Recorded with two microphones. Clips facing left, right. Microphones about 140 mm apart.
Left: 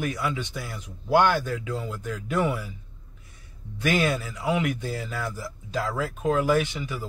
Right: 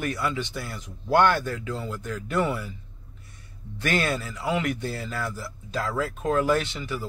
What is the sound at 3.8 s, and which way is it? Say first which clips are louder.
A man's voice: left 2 dB; 10° left (ahead or behind).